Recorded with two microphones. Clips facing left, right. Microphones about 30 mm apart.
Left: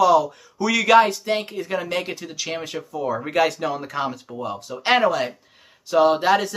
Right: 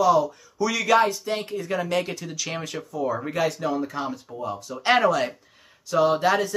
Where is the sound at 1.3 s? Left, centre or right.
Left.